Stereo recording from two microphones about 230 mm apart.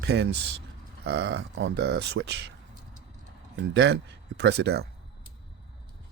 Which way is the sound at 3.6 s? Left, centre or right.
Right.